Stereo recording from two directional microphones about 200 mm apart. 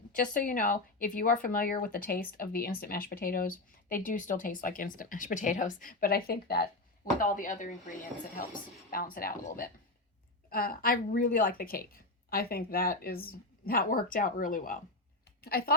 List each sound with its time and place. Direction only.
0.2 s speech: 40° left (ahead or behind)
8.9 s a woman's voice: 45° left (ahead or behind)